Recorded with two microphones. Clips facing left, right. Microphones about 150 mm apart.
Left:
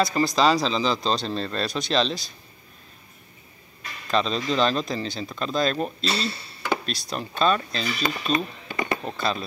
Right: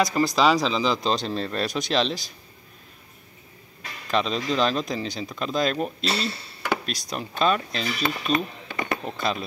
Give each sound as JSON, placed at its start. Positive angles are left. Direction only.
{"t": 0.0, "sound": "speech", "side_deg": -10}
{"t": 4.1, "sound": "speech", "side_deg": -10}
{"t": 8.0, "sound": "speech", "side_deg": -5}
{"t": 9.1, "sound": "speech", "side_deg": -15}